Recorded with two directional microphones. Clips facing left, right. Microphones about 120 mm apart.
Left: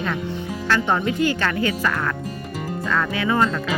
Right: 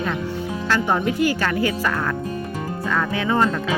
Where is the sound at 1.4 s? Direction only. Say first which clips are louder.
Right 1 dB; 15° right (ahead or behind).